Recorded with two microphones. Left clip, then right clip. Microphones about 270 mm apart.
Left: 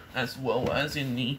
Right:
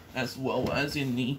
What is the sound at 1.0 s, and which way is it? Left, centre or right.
Speech, left.